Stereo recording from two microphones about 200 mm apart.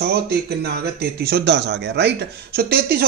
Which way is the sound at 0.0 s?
55° right (ahead or behind).